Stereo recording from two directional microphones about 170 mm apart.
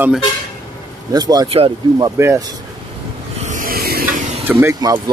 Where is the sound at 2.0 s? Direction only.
20° right (ahead or behind).